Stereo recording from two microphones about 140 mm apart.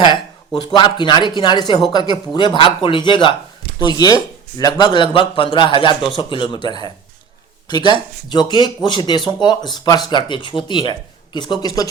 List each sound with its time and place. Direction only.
0.7 s speech: 35° left (ahead or behind)